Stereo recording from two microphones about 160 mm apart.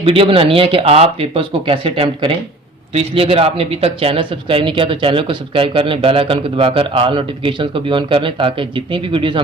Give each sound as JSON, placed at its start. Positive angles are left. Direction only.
{"t": 0.0, "sound": "speech", "side_deg": -35}